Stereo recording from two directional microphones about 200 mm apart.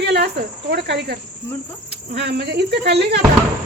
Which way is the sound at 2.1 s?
55° right (ahead or behind).